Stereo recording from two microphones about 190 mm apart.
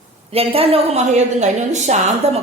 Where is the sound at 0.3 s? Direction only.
30° right (ahead or behind).